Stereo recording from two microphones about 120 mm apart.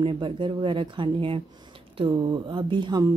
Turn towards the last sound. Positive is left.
turn(degrees=-40)  # may be behind; listen again after turning